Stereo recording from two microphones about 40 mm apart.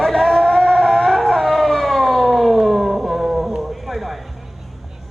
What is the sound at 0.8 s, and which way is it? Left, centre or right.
Shofar, centre.